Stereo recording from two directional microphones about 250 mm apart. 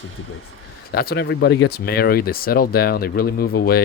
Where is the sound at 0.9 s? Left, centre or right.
Left.